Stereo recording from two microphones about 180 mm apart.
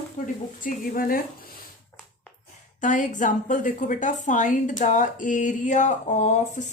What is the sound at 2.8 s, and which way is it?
A woman's voice, 45° left (ahead or behind).